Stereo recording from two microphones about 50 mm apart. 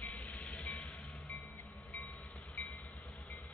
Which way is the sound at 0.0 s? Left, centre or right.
Left.